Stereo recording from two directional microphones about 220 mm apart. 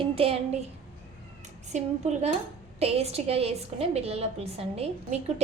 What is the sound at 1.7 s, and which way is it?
A woman's voice, 30° right (ahead or behind).